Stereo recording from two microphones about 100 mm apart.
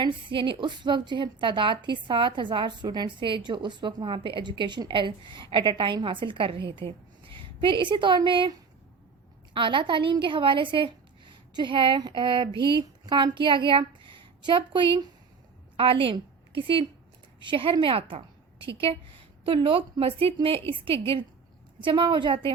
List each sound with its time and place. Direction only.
0.0 s a woman's voice: 55° right (ahead or behind)
9.6 s a woman's voice: 55° right (ahead or behind)
21.8 s a woman's voice: 55° right (ahead or behind)